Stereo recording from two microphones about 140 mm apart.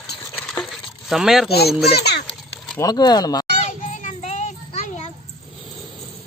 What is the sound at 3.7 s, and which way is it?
Child singing, 65° left (ahead or behind).